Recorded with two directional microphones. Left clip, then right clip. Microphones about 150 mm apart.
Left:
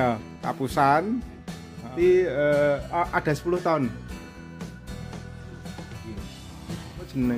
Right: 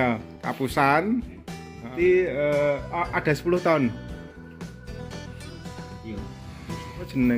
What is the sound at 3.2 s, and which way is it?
Speech, centre (ahead or behind).